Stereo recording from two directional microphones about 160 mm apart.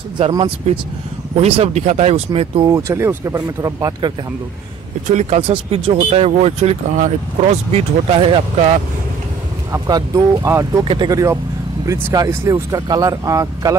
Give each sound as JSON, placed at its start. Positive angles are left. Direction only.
{"t": 1.3, "sound": "speech", "side_deg": -40}
{"t": 2.7, "sound": "speech", "side_deg": -15}
{"t": 5.0, "sound": "speech", "side_deg": -45}
{"t": 5.5, "sound": "speech", "side_deg": -35}
{"t": 9.7, "sound": "speech", "side_deg": -25}